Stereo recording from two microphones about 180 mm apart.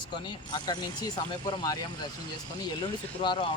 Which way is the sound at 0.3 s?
25° left (ahead or behind).